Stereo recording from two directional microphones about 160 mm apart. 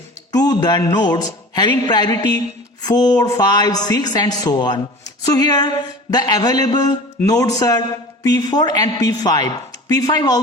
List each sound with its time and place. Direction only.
0.3 s speech: 25° left (ahead or behind)